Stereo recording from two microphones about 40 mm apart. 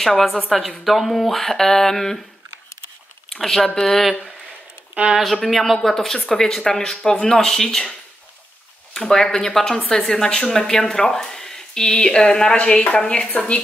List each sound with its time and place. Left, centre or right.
0.0 s speech: centre
3.3 s speech: centre
4.0 s speech: centre
8.9 s speech: centre